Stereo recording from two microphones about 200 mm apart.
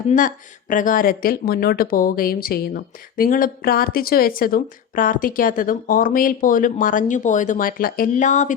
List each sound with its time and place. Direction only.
0.1 s speech: 40° left (ahead or behind)